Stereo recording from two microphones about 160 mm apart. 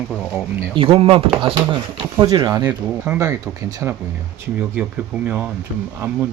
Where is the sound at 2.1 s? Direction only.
20° right (ahead or behind).